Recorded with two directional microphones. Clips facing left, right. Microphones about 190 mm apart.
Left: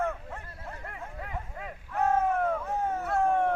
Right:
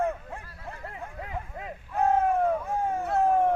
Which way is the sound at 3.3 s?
5° right (ahead or behind).